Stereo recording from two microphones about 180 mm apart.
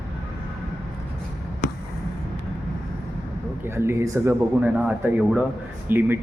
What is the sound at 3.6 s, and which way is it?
A man's voice, 15° right (ahead or behind).